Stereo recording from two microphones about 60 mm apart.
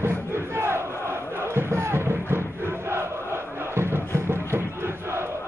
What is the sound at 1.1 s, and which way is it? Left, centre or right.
Battle cry, right.